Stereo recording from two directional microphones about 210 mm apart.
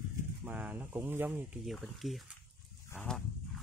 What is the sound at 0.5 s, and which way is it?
Speech, 10° right (ahead or behind).